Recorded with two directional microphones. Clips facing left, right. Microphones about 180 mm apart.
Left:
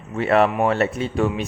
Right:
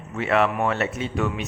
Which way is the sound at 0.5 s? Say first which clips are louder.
Left 4 dB; 25° left (ahead or behind).